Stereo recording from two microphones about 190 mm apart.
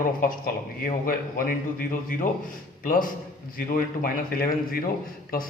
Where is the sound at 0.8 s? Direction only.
50° left (ahead or behind).